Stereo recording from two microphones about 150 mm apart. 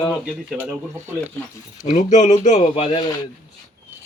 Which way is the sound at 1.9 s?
55° left (ahead or behind).